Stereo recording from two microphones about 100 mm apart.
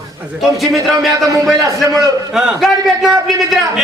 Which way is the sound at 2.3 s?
5° right (ahead or behind).